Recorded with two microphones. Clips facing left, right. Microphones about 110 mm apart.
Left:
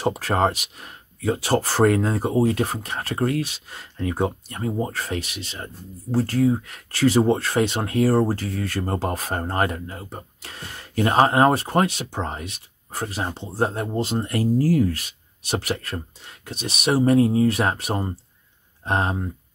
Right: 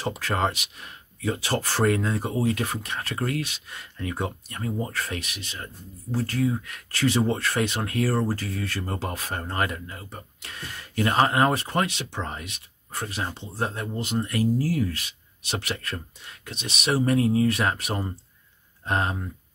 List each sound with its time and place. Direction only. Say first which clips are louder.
0.0 s speech: left 5 dB; 40° left (ahead or behind)